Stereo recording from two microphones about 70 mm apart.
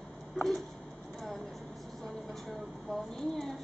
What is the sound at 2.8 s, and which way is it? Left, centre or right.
Speech, centre.